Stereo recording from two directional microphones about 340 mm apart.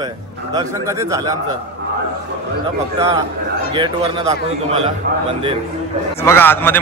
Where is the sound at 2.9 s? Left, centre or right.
Centre.